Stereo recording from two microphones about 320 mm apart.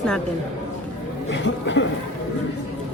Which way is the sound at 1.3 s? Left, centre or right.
Left.